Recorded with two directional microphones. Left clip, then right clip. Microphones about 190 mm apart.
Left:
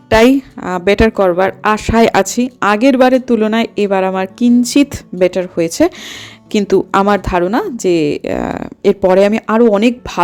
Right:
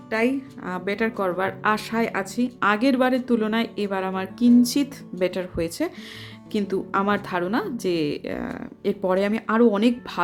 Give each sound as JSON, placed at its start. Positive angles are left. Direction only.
{"t": 0.1, "sound": "a woman's voice", "side_deg": 50}
{"t": 0.5, "sound": "a woman's voice", "side_deg": 35}
{"t": 2.0, "sound": "a woman's voice", "side_deg": 40}